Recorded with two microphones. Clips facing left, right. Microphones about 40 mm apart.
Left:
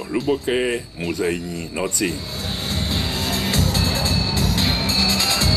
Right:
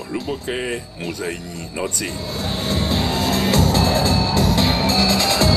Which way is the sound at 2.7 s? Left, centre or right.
Centre.